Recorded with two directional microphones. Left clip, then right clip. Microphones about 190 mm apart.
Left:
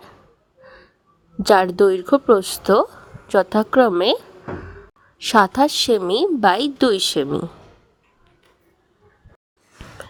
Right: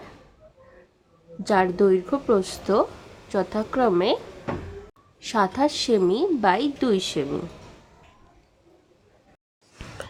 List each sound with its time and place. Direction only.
1.4 s a woman's voice: 50° left (ahead or behind)
5.2 s a woman's voice: 45° left (ahead or behind)
9.7 s a sound: centre (ahead or behind)